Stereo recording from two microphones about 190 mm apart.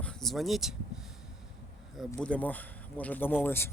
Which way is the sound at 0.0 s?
5° left (ahead or behind).